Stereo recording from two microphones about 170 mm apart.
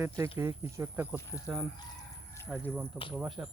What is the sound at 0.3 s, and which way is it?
Speech, 15° right (ahead or behind).